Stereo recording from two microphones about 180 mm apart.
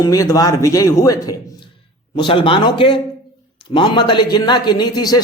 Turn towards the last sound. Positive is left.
turn(degrees=20)  # may be behind; listen again after turning